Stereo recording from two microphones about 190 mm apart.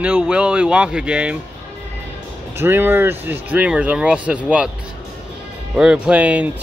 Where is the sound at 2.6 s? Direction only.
10° right (ahead or behind).